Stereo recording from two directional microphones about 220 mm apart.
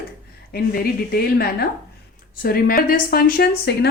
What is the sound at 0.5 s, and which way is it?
Speech, 45° left (ahead or behind).